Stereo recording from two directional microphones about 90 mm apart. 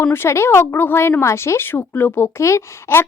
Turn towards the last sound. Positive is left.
turn(degrees=30)  # may be behind; listen again after turning